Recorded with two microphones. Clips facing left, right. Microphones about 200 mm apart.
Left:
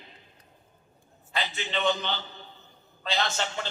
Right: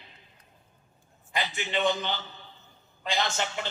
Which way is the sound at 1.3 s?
15° right (ahead or behind).